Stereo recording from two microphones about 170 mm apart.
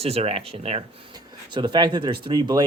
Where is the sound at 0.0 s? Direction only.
35° right (ahead or behind).